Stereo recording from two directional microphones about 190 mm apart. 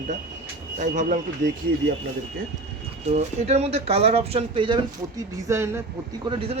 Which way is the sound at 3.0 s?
35° right (ahead or behind).